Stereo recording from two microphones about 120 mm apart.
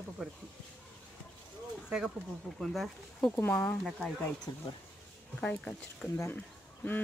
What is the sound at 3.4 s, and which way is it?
Speech, 15° left (ahead or behind).